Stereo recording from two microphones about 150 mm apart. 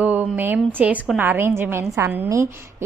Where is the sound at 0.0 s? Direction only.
10° right (ahead or behind).